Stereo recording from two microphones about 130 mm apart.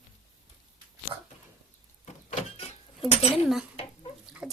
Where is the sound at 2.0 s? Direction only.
60° left (ahead or behind).